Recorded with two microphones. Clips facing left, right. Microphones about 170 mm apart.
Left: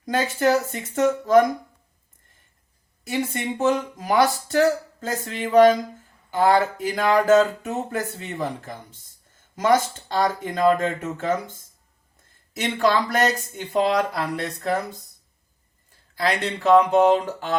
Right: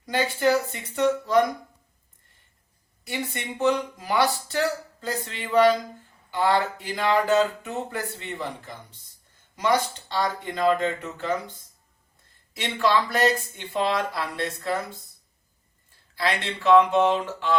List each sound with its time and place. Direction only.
0.0 s speech: 45° left (ahead or behind)
3.1 s speech: 45° left (ahead or behind)
16.5 s a sound: 40° left (ahead or behind)